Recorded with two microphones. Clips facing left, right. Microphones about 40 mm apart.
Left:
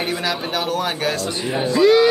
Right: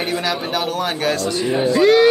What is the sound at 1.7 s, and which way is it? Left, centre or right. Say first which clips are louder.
Speech: even; right.